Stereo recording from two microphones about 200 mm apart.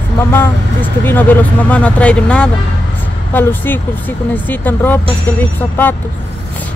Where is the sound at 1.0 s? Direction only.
10° left (ahead or behind).